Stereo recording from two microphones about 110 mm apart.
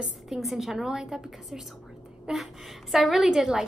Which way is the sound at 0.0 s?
Centre (ahead or behind).